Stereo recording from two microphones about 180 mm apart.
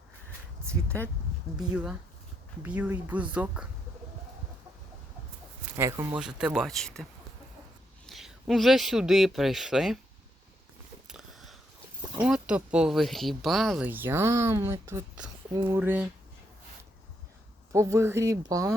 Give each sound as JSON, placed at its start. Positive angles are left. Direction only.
{"t": 0.7, "sound": "a sound", "side_deg": 10}
{"t": 1.5, "sound": "speech", "side_deg": -5}
{"t": 5.7, "sound": "speech", "side_deg": -15}
{"t": 6.1, "sound": "speech", "side_deg": -5}
{"t": 11.1, "sound": "a sound", "side_deg": 0}
{"t": 12.2, "sound": "speech", "side_deg": -5}
{"t": 17.7, "sound": "speech", "side_deg": -15}